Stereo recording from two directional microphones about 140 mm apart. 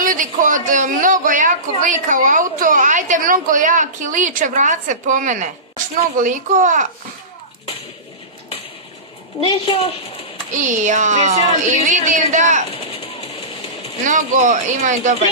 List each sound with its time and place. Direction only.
0.0 s a woman's voice: 70° right (ahead or behind)
9.4 s a child's voice: 40° left (ahead or behind)
10.5 s a woman's voice: 60° right (ahead or behind)
12.9 s a sound: 45° left (ahead or behind)
14.0 s a woman's voice: 65° right (ahead or behind)